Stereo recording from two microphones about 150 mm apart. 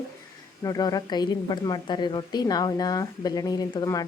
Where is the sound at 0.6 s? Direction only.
25° left (ahead or behind).